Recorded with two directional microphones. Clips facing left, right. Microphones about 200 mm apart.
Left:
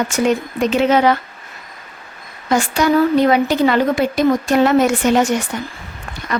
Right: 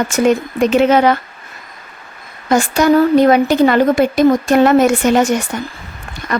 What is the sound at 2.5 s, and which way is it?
A woman's voice, 45° right (ahead or behind).